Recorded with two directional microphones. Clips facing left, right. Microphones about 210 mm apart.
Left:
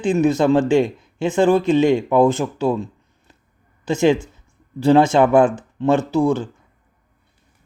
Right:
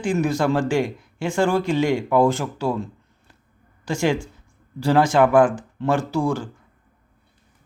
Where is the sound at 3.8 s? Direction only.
20° left (ahead or behind).